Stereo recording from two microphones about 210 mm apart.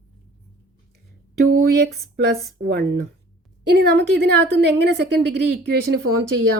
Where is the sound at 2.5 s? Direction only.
50° right (ahead or behind).